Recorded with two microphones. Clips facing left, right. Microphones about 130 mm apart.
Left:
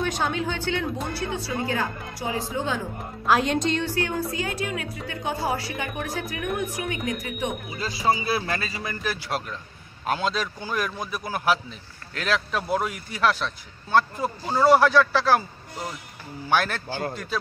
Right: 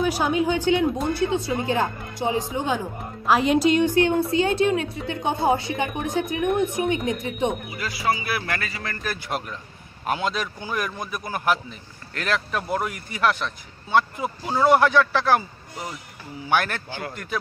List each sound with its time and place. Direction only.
0.0 s a woman's voice: 10° right (ahead or behind)
3.3 s a woman's voice: centre (ahead or behind); by 7.5 s 25° right (ahead or behind)
7.7 s speech: 25° left (ahead or behind)
8.9 s speech: centre (ahead or behind)